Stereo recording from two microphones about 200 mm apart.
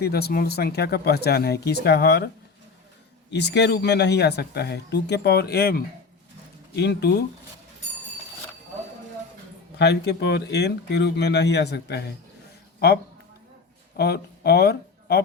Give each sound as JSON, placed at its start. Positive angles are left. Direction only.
{"t": 0.0, "sound": "speech", "side_deg": 50}
{"t": 9.7, "sound": "speech", "side_deg": 55}
{"t": 13.9, "sound": "speech", "side_deg": 55}